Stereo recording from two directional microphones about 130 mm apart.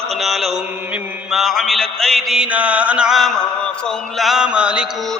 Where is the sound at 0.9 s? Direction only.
10° right (ahead or behind).